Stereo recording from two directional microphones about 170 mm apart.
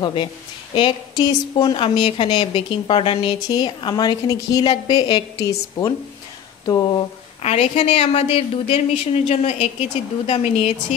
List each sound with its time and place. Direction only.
0.0 s a woman's voice: 30° left (ahead or behind)
6.6 s speech: 25° left (ahead or behind)
7.4 s a woman's voice: 40° left (ahead or behind)